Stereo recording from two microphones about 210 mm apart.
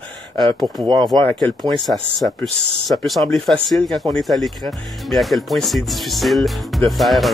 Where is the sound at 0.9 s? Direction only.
20° right (ahead or behind).